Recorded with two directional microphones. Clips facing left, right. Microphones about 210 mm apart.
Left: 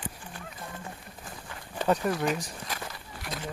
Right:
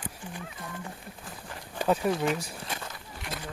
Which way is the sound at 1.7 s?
5° right (ahead or behind).